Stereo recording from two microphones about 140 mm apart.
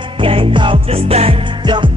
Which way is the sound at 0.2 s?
40° right (ahead or behind).